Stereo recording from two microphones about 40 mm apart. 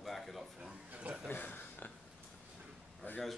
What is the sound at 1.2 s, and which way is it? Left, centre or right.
Speech, left.